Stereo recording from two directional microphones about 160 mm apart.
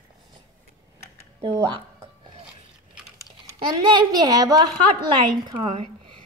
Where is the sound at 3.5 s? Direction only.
30° right (ahead or behind).